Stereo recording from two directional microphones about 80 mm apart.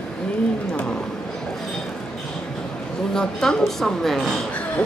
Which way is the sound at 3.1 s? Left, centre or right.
Centre.